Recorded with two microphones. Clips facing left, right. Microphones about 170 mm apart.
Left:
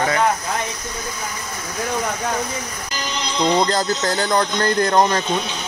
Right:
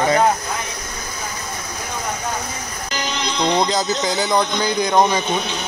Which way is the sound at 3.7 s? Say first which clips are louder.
Even; centre (ahead or behind).